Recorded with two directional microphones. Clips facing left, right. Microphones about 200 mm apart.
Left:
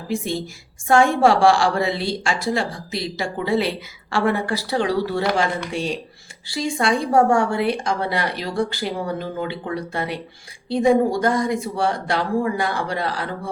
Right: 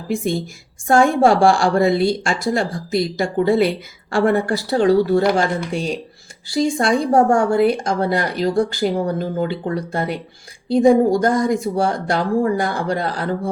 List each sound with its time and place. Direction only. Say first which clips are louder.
0.9 s a woman's voice: right 2 dB; 45° right (ahead or behind)